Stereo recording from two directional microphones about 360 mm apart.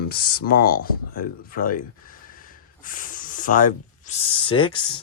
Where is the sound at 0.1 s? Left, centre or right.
Left.